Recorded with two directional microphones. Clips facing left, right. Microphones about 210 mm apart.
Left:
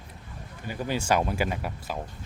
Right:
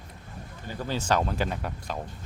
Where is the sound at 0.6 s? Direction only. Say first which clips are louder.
Left 2 dB; 15° left (ahead or behind).